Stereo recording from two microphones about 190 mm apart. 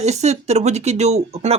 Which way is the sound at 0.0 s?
35° right (ahead or behind).